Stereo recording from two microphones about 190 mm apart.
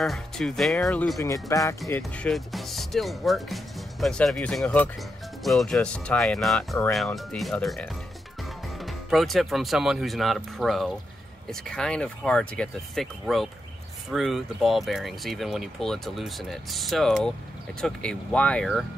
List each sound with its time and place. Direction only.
0.0 s speech: centre (ahead or behind)
1.1 s speech: 15° left (ahead or behind)
2.2 s speech: centre (ahead or behind)